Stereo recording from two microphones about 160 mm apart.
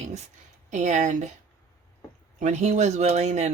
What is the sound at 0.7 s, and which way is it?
Speech, 50° right (ahead or behind).